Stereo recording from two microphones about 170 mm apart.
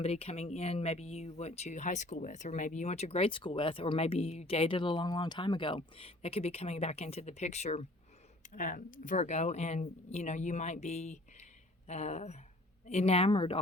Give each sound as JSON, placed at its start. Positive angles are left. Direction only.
{"t": 0.0, "sound": "speech", "side_deg": 35}